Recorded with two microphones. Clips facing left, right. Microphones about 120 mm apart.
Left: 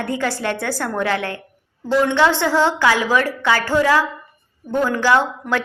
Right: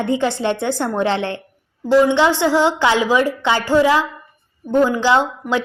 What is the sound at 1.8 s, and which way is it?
A woman's voice, 15° right (ahead or behind).